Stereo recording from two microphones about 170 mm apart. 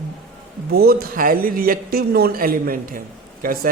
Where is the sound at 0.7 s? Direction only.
65° right (ahead or behind).